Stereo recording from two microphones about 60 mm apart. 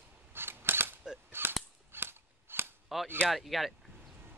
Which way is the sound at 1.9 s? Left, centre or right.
Right.